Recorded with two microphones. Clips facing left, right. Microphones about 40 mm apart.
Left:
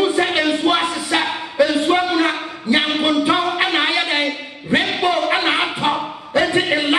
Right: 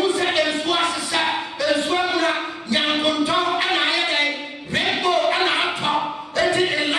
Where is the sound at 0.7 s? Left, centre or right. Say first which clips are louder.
Left 5 dB; left.